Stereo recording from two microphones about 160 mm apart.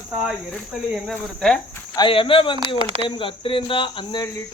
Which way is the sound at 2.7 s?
40° right (ahead or behind).